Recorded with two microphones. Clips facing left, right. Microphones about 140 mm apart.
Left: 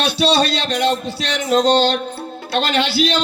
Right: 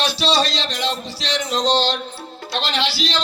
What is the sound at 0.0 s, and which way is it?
A man's voice, 60° left (ahead or behind).